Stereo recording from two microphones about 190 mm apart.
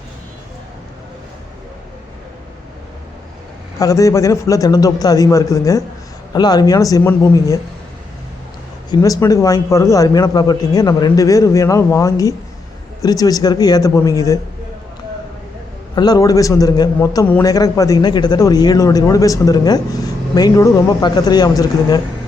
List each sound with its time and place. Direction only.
3.8 s a man's voice: 15° left (ahead or behind)
8.9 s a man's voice: 20° left (ahead or behind)
16.0 s a man's voice: 20° left (ahead or behind)
17.2 s a man's voice: 10° left (ahead or behind)